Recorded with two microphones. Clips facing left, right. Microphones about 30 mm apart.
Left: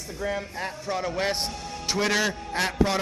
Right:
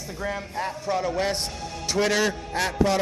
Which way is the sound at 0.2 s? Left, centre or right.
Centre.